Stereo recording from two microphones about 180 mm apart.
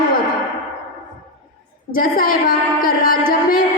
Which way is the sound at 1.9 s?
50° left (ahead or behind).